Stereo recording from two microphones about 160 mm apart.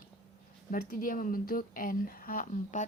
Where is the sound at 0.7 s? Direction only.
60° left (ahead or behind).